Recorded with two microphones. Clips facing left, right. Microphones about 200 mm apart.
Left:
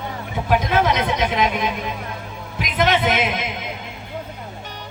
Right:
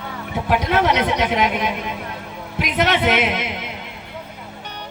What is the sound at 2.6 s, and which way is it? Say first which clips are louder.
Speech: even; 70° right (ahead or behind).